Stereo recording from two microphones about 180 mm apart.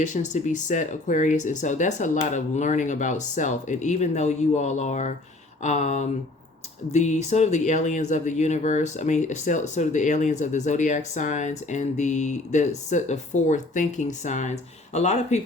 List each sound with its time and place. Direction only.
0.0 s speech: 40° left (ahead or behind)